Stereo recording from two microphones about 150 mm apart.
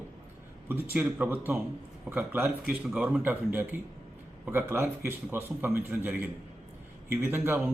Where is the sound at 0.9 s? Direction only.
10° right (ahead or behind).